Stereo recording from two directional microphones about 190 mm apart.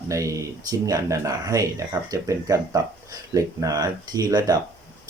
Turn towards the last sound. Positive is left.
turn(degrees=-20)  # may be behind; listen again after turning